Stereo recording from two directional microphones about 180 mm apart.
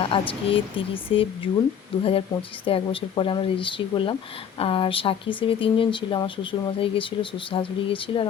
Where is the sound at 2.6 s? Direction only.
30° left (ahead or behind).